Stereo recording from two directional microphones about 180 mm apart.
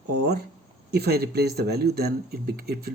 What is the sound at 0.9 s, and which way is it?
Speech, 65° right (ahead or behind).